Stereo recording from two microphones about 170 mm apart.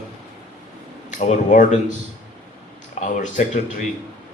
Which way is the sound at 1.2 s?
45° left (ahead or behind).